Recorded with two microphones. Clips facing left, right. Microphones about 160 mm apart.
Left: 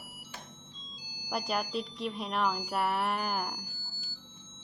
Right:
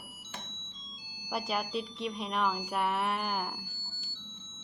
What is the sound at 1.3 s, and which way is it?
Speech, centre (ahead or behind).